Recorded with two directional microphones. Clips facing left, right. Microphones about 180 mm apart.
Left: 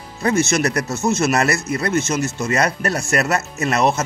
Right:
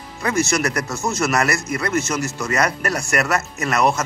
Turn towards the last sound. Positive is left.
turn(degrees=25)  # may be behind; listen again after turning